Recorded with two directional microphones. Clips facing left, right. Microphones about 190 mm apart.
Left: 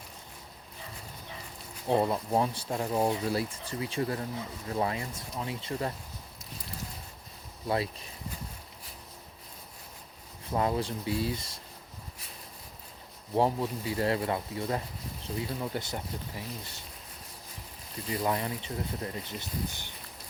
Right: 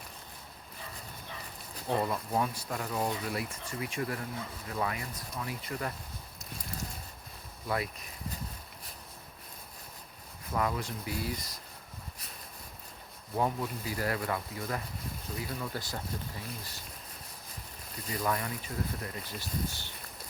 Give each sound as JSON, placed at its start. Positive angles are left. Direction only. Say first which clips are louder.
{"t": 1.9, "sound": "speech", "louder": "left 4 dB", "side_deg": 25}
{"t": 7.7, "sound": "speech", "louder": "left 3 dB", "side_deg": 30}
{"t": 10.5, "sound": "speech", "louder": "left 4 dB", "side_deg": 30}
{"t": 13.3, "sound": "speech", "louder": "left 4 dB", "side_deg": 30}
{"t": 18.1, "sound": "speech", "louder": "left 3 dB", "side_deg": 25}